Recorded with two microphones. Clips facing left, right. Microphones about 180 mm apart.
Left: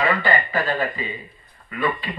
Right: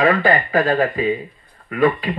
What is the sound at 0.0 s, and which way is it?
Speech, 50° right (ahead or behind).